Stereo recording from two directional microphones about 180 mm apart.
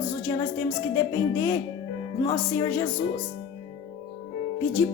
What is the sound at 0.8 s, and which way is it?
Speech, 15° left (ahead or behind).